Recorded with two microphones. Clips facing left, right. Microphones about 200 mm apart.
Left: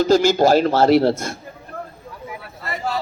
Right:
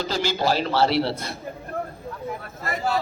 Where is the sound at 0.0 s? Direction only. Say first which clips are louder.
Left 10 dB; 45° left (ahead or behind).